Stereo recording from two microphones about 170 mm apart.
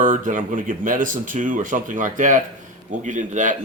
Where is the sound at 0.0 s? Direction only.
50° right (ahead or behind).